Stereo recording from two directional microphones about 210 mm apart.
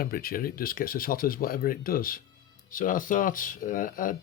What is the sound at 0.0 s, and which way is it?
Speech, 45° left (ahead or behind).